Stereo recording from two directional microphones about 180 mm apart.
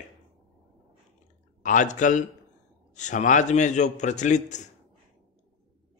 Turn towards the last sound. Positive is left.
turn(degrees=40)  # may be behind; listen again after turning